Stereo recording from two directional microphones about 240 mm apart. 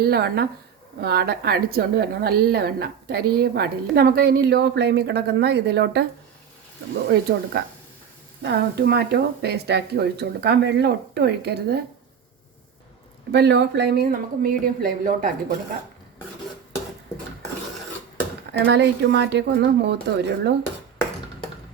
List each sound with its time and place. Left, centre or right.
0.0 s a woman's voice: right
7.1 s speech: right
13.3 s a woman's voice: right
18.6 s speech: right